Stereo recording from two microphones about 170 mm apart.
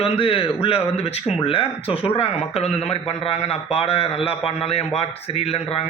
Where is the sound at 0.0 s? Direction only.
35° left (ahead or behind).